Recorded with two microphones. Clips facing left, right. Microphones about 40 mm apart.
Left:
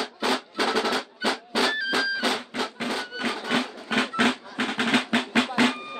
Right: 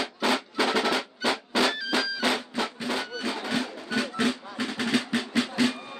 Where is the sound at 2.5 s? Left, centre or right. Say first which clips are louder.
Even; left.